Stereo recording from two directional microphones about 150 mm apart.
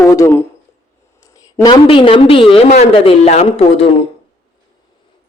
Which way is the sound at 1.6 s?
35° left (ahead or behind).